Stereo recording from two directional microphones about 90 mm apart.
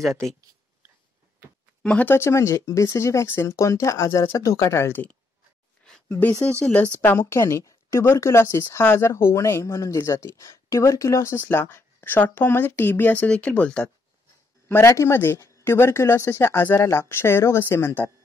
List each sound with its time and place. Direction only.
0.0 s speech: centre (ahead or behind)
1.8 s speech: 10° left (ahead or behind)
2.0 s speech: 30° left (ahead or behind)
6.0 s speech: 20° left (ahead or behind)
14.7 s speech: 30° left (ahead or behind)